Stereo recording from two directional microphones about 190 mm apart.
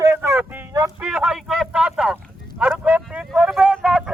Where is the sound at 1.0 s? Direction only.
5° right (ahead or behind).